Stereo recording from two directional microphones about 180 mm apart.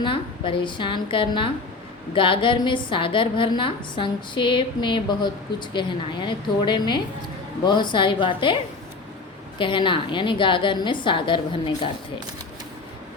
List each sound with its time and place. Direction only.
0.0 s a woman's voice: 30° left (ahead or behind)
9.6 s a woman's voice: 25° left (ahead or behind)